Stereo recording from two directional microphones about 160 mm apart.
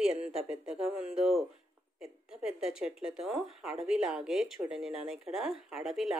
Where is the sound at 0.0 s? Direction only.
5° right (ahead or behind).